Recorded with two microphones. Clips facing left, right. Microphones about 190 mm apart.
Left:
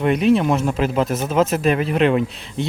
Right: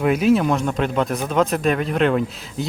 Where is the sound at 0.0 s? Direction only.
Centre (ahead or behind).